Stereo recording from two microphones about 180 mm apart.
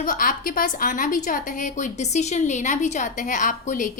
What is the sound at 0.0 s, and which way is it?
A woman's voice, 50° left (ahead or behind).